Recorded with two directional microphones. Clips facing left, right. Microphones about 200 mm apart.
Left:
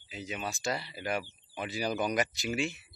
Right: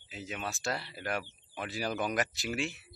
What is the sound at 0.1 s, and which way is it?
Speech, centre (ahead or behind).